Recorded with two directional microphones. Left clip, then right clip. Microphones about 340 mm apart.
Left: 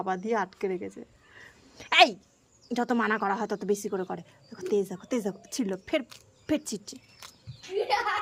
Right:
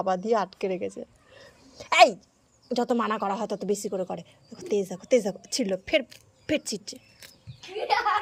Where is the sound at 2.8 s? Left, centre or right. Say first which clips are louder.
Right 1 dB; centre.